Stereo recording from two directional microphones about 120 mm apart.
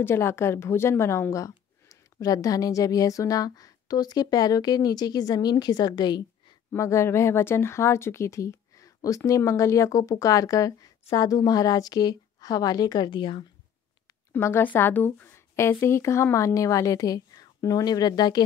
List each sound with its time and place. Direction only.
0.0 s speech: 20° left (ahead or behind); by 6.2 s 35° left (ahead or behind)
6.7 s speech: 25° left (ahead or behind); by 13.5 s 45° left (ahead or behind)
14.3 s a woman's voice: 15° left (ahead or behind); by 18.4 s 35° left (ahead or behind)